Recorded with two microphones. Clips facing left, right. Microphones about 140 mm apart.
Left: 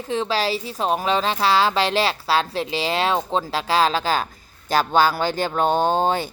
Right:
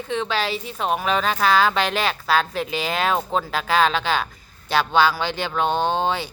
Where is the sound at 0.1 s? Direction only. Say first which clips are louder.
Left 2 dB; 35° left (ahead or behind).